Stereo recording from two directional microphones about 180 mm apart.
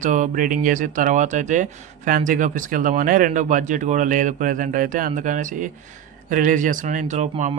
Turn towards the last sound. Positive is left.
turn(degrees=-45)  # may be behind; listen again after turning